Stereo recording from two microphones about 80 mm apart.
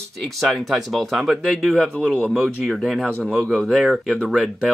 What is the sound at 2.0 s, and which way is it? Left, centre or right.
Speech, centre.